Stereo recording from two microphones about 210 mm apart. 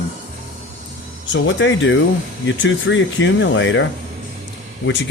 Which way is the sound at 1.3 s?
65° left (ahead or behind).